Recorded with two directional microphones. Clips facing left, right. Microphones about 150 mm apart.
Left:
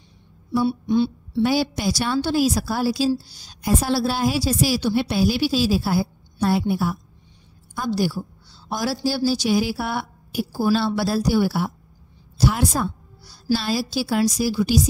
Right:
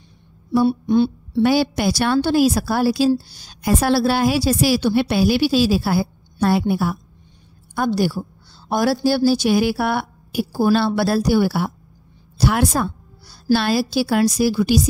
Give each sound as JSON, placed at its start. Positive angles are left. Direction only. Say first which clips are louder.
{"t": 0.5, "sound": "a woman's voice", "louder": "right 4 dB", "side_deg": -55}